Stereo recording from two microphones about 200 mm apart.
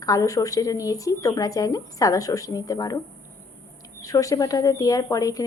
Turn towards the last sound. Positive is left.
turn(degrees=15)  # may be behind; listen again after turning